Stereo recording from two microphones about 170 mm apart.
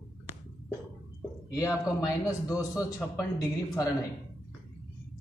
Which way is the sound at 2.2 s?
20° left (ahead or behind).